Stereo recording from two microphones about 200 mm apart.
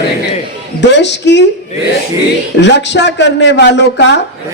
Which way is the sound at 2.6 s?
60° left (ahead or behind).